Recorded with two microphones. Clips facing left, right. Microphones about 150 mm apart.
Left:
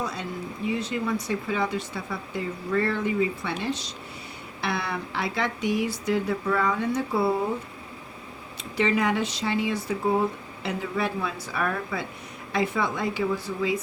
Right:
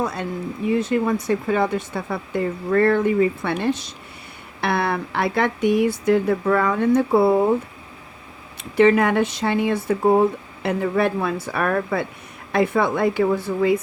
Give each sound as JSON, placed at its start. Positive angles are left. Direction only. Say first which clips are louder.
{"t": 0.0, "sound": "speech", "louder": "right 6 dB", "side_deg": -55}
{"t": 8.7, "sound": "speech", "louder": "right 8 dB", "side_deg": -55}